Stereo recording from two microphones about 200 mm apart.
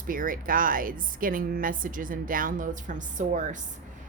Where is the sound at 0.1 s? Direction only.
45° right (ahead or behind).